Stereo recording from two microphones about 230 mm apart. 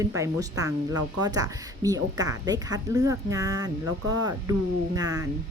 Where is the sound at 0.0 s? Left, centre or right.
Centre.